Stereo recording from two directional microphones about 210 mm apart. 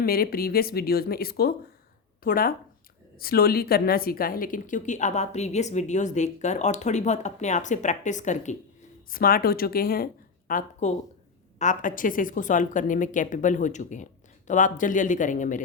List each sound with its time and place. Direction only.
0.0 s a woman's voice: 45° left (ahead or behind)
10.5 s a woman's voice: 35° left (ahead or behind)